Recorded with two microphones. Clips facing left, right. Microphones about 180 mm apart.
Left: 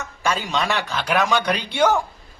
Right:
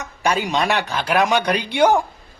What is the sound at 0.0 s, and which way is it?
Speech, 15° right (ahead or behind).